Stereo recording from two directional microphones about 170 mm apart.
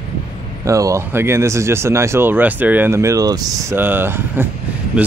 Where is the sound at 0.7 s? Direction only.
20° right (ahead or behind).